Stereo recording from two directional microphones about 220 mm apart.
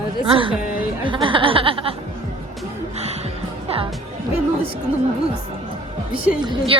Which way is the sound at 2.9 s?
30° right (ahead or behind).